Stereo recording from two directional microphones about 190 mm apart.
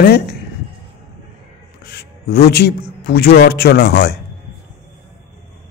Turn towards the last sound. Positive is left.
turn(degrees=60)  # may be behind; listen again after turning